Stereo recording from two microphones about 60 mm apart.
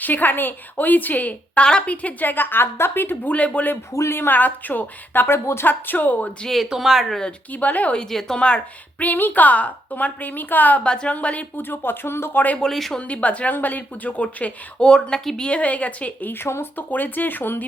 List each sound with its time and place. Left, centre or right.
0.0 s a woman's voice: left
3.9 s speech: left
6.4 s speech: centre
7.5 s a woman's voice: left
7.9 s a woman's voice: centre; by 10.8 s left
10.8 s a woman's voice: centre
11.5 s speech: left
12.5 s speech: centre
13.0 s a woman's voice: left
15.4 s a woman's voice: left
16.3 s speech: left
16.7 s speech: left